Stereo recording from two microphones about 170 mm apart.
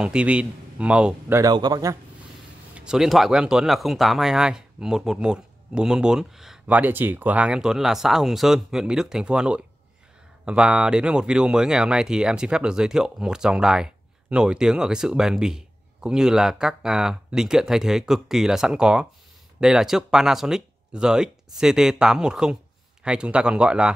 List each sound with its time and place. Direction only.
0.0 s speech: 5° right (ahead or behind)
1.4 s speech: 25° right (ahead or behind)
2.7 s speech: 5° right (ahead or behind)